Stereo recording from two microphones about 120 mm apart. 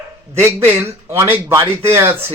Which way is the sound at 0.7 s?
20° right (ahead or behind).